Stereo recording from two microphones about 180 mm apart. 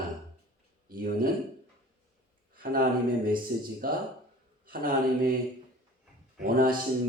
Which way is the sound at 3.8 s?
55° right (ahead or behind).